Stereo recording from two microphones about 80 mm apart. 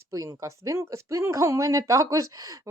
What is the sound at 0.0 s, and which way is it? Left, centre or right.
Speech, right.